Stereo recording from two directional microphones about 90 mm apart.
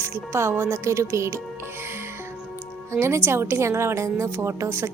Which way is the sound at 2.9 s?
30° right (ahead or behind).